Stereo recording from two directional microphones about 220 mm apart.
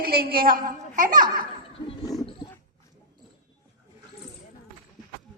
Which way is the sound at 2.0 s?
15° left (ahead or behind).